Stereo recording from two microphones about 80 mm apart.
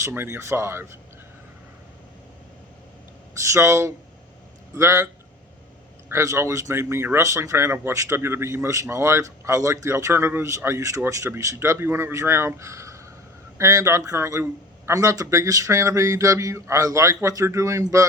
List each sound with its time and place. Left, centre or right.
0.1 s a man's voice: right
3.3 s a man's voice: right
6.1 s a man's voice: right